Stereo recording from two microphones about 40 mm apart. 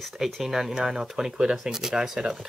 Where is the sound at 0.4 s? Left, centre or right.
Centre.